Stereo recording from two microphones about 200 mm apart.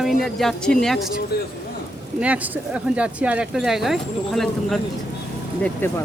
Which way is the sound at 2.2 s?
5° right (ahead or behind).